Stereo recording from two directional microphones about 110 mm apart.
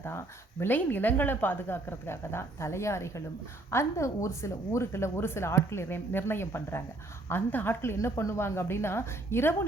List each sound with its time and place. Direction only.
0.6 s a woman's voice: 15° left (ahead or behind)